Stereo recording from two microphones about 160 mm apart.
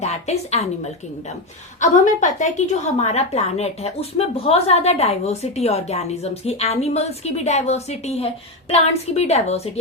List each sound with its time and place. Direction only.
0.0 s a woman's voice: 45° left (ahead or behind)
1.8 s a woman's voice: 50° left (ahead or behind)